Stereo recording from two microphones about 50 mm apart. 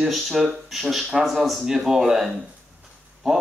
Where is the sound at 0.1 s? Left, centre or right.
Centre.